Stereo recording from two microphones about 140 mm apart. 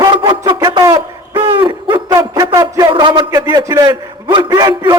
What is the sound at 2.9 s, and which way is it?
Speech, 35° right (ahead or behind).